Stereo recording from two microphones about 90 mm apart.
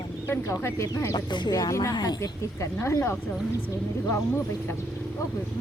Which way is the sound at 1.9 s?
50° left (ahead or behind).